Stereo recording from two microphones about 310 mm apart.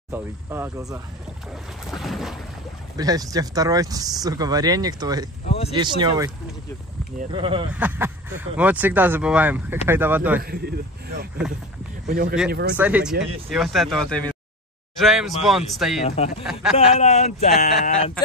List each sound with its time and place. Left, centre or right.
0.1 s speech: centre
1.9 s boat: centre
3.0 s speech: centre
5.5 s speech: centre
5.8 s speech: centre
7.7 s speech: centre
10.4 s a man's voice: right
12.1 s a man's voice: right
12.7 s speech: centre
16.0 s speech: centre